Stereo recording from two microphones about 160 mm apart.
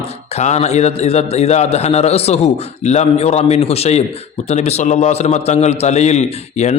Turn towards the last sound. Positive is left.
turn(degrees=45)  # may be behind; listen again after turning